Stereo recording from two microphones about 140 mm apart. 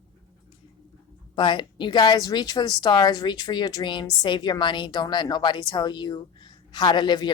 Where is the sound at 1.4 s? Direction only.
35° left (ahead or behind).